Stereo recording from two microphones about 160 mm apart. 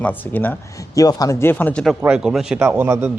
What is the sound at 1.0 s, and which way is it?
Speech, 20° left (ahead or behind).